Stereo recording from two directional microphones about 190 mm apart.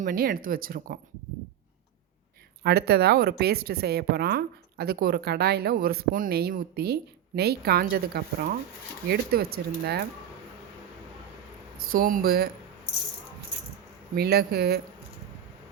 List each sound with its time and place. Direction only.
0.0 s speech: 45° right (ahead or behind)
2.6 s a woman's voice: 55° right (ahead or behind)
11.9 s speech: 45° right (ahead or behind)
14.2 s a woman's voice: 55° right (ahead or behind)